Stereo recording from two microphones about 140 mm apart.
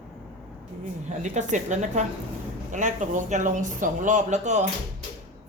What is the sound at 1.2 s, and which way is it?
Speech, 60° right (ahead or behind).